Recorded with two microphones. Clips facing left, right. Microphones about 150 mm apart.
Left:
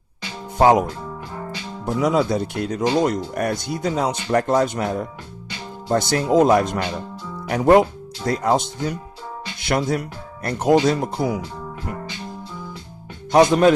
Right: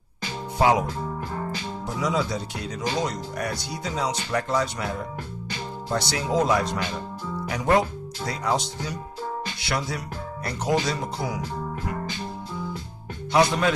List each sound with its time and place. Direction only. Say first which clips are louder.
0.6 s speech: left 6 dB; 50° left (ahead or behind)
13.3 s speech: left 7 dB; 50° left (ahead or behind)